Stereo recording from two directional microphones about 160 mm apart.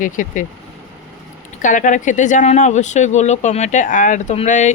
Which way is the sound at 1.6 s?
50° left (ahead or behind).